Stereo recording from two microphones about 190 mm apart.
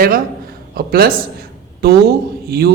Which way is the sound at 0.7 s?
55° right (ahead or behind).